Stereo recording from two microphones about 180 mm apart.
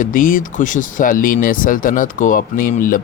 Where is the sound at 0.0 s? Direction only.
50° left (ahead or behind).